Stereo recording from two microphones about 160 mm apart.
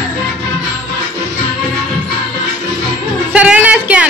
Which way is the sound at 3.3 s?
10° right (ahead or behind).